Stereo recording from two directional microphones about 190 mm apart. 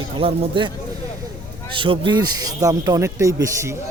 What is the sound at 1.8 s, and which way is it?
Speech, 25° right (ahead or behind).